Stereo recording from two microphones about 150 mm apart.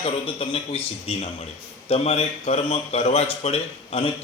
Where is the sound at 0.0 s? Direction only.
40° left (ahead or behind).